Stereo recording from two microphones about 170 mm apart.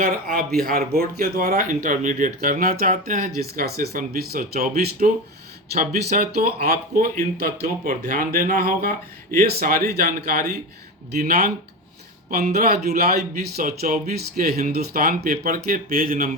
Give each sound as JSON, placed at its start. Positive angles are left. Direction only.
{"t": 0.0, "sound": "speech", "side_deg": -50}
{"t": 12.5, "sound": "speech", "side_deg": -65}